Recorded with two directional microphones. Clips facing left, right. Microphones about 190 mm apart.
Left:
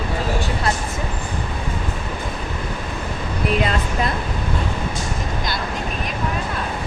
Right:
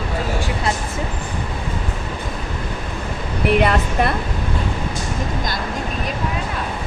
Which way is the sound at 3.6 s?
60° right (ahead or behind).